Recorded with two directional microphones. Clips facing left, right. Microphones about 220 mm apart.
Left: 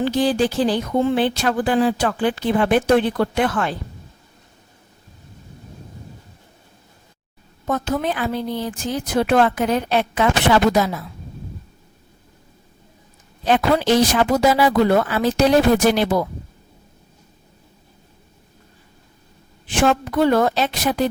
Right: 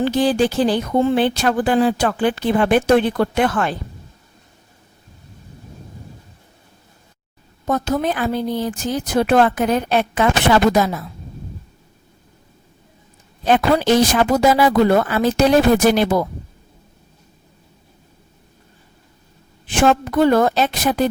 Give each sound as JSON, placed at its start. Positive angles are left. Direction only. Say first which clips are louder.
{"t": 0.0, "sound": "speech", "louder": "right 2 dB", "side_deg": -55}
{"t": 7.7, "sound": "speech", "louder": "right 2 dB", "side_deg": -40}
{"t": 13.4, "sound": "speech", "louder": "right 2 dB", "side_deg": -50}
{"t": 19.7, "sound": "speech", "louder": "right 2 dB", "side_deg": -50}